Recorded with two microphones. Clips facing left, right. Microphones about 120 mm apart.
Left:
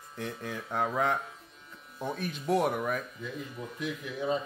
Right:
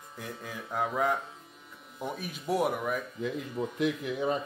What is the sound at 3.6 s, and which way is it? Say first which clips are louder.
Speech: right 8 dB; 90° right.